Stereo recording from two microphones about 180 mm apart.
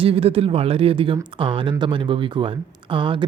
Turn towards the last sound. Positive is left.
turn(degrees=-30)  # may be behind; listen again after turning